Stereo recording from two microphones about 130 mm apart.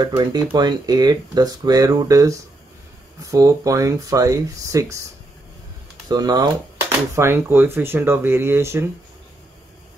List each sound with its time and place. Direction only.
0.0 s speech: 35° right (ahead or behind)
6.0 s speech: 30° right (ahead or behind)
6.9 s speech: 20° right (ahead or behind)